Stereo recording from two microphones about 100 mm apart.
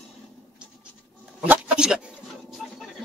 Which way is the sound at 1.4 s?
15° right (ahead or behind).